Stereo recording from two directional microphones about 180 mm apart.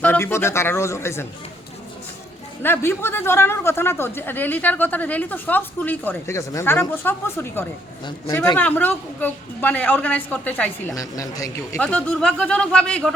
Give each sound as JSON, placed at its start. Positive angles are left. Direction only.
{"t": 0.0, "sound": "a man's voice", "side_deg": 10}
{"t": 2.6, "sound": "a man's voice", "side_deg": 15}
{"t": 11.8, "sound": "speech", "side_deg": 5}